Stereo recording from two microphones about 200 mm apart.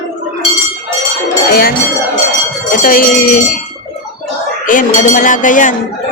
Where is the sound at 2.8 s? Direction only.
45° left (ahead or behind).